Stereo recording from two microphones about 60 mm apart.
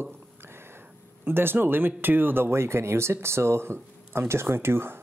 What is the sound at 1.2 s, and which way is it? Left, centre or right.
Speech, right.